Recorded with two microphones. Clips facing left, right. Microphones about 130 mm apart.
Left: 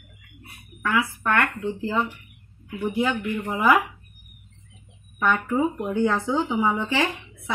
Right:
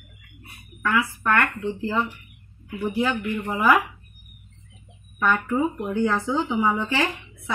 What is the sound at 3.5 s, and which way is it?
Speech, 15° left (ahead or behind).